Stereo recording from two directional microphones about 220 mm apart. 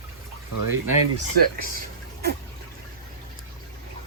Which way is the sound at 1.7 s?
45° right (ahead or behind).